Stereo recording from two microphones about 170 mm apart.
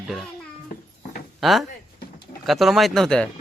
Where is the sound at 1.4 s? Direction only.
Centre (ahead or behind).